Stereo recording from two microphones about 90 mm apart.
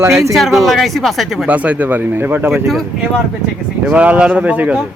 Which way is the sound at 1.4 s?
15° right (ahead or behind).